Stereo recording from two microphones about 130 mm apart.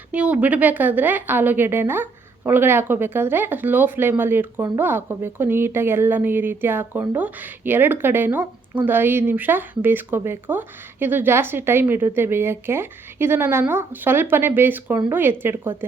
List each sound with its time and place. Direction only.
0.1 s a woman's voice: 10° right (ahead or behind)